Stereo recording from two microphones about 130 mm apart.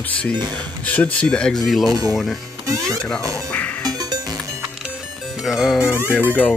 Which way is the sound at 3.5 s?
10° left (ahead or behind).